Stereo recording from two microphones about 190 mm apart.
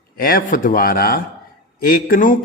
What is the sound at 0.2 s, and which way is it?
A man's voice, 50° left (ahead or behind).